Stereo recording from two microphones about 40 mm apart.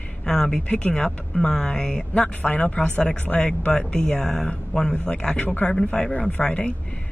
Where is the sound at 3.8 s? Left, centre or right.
Centre.